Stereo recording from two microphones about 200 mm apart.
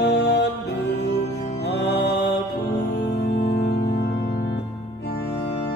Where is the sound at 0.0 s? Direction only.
55° left (ahead or behind).